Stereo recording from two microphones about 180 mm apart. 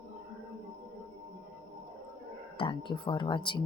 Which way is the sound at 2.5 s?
30° left (ahead or behind).